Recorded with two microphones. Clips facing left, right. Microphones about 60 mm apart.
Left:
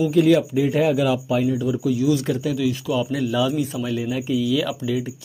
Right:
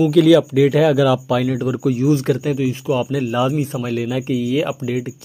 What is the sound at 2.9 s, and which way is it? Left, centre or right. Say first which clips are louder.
Speech: right 2 dB; right.